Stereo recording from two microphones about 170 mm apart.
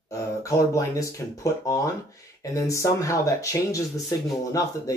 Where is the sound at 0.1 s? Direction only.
20° left (ahead or behind).